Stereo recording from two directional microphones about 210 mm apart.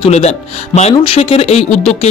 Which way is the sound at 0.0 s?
30° left (ahead or behind).